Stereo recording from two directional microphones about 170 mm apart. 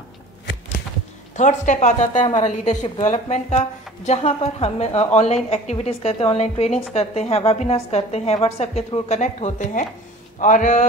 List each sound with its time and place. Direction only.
1.3 s a woman's voice: 45° left (ahead or behind)